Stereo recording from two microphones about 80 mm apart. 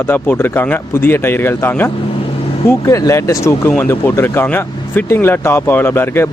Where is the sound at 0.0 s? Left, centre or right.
Left.